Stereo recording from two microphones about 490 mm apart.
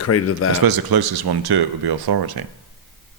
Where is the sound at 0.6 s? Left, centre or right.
Right.